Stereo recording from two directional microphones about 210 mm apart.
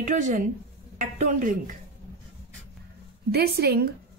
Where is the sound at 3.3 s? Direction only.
50° right (ahead or behind).